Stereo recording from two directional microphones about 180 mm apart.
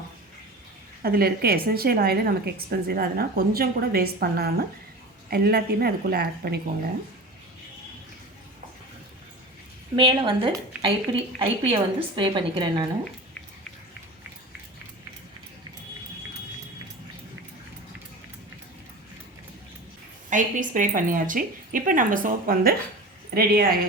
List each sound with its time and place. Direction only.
1.0 s a woman's voice: 60° right (ahead or behind)
9.9 s a woman's voice: 30° right (ahead or behind)
20.3 s a woman's voice: 45° right (ahead or behind)